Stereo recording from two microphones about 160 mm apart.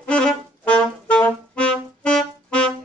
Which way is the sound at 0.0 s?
5° left (ahead or behind).